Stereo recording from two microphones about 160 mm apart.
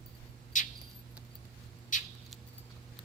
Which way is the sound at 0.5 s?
50° left (ahead or behind).